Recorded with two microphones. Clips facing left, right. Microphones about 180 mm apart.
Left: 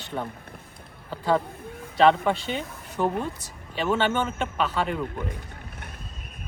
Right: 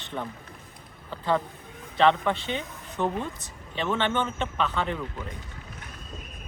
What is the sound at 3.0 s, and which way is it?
Speech, 10° left (ahead or behind).